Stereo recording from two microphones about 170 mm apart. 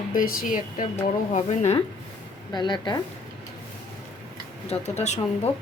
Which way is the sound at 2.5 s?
25° left (ahead or behind).